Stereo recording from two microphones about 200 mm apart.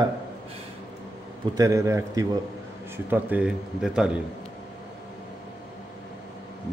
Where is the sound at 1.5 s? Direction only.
15° right (ahead or behind).